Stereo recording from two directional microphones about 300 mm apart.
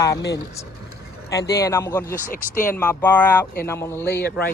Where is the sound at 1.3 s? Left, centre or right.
Centre.